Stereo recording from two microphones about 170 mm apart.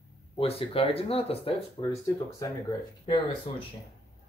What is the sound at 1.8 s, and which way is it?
Speech, 15° left (ahead or behind).